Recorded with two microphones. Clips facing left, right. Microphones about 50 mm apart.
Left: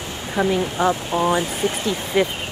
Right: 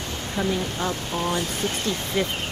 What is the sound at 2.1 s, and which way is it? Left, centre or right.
Speech, left.